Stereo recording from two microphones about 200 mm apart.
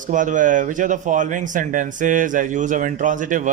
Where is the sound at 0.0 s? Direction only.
40° right (ahead or behind).